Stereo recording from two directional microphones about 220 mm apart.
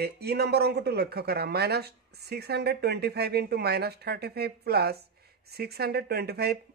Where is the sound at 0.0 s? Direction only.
45° right (ahead or behind).